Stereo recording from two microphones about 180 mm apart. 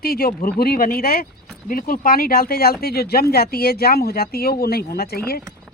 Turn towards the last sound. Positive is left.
turn(degrees=60)  # may be behind; listen again after turning